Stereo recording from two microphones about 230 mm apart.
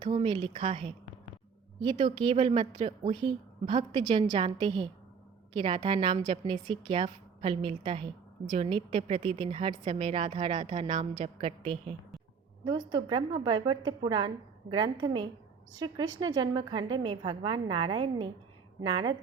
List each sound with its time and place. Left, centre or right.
0.0 s a woman's voice: right